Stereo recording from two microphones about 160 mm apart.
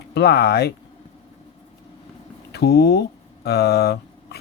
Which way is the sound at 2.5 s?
85° left.